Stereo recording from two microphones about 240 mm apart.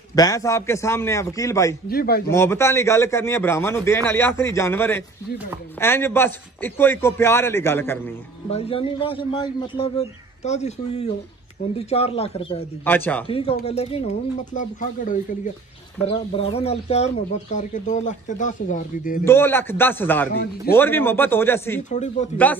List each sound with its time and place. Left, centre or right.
0.1 s a man's voice: centre
1.9 s speech: left
2.3 s a man's voice: centre
8.5 s a man's voice: left
12.8 s a man's voice: centre
13.3 s a man's voice: left
19.2 s a man's voice: centre
21.9 s a man's voice: left